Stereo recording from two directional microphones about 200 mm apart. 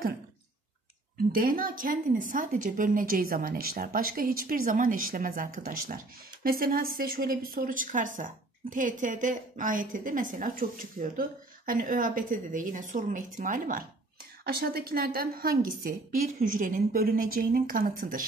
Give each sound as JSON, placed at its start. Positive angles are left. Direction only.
{"t": 1.3, "sound": "a woman's voice", "side_deg": -45}